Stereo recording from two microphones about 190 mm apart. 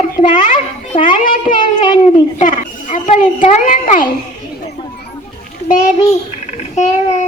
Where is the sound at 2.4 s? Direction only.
40° left (ahead or behind).